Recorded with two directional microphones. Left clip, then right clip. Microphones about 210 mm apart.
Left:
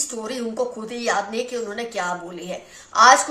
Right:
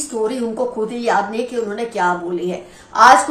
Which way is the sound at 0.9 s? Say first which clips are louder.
Right 5 dB; 45° left (ahead or behind).